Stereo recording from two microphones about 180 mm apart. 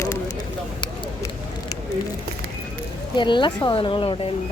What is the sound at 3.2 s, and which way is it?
Speech, 25° left (ahead or behind).